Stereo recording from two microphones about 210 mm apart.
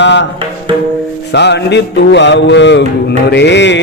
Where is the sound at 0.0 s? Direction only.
60° left (ahead or behind).